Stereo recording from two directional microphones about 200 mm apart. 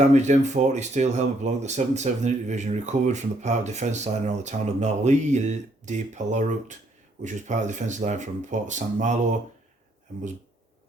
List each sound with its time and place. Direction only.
0.0 s speech: 35° right (ahead or behind)